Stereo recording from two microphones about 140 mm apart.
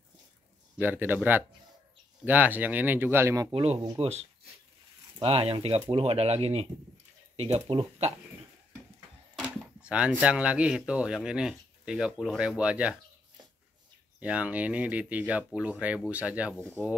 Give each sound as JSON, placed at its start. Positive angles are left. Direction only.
{"t": 0.7, "sound": "speech", "side_deg": -15}
{"t": 3.5, "sound": "speech", "side_deg": -45}
{"t": 9.3, "sound": "speech", "side_deg": -10}
{"t": 14.2, "sound": "speech", "side_deg": -10}